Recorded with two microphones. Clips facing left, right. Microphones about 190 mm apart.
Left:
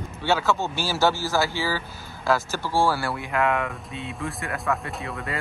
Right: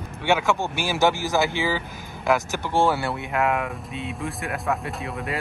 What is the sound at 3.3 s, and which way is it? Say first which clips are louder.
Speech: even; 5° right (ahead or behind).